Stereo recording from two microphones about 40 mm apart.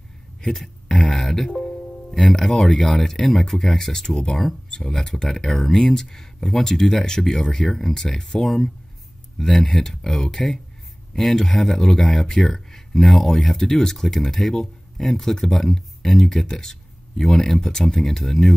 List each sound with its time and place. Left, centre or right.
1.1 s speech: centre